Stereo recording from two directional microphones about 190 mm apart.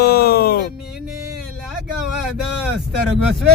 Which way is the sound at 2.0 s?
5° right (ahead or behind).